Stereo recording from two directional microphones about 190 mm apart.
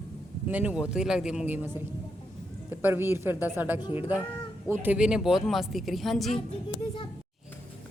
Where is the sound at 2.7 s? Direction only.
10° right (ahead or behind).